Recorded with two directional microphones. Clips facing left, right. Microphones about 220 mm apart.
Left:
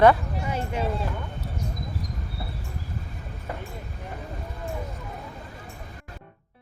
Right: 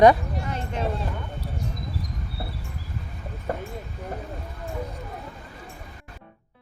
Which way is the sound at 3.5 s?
45° right (ahead or behind).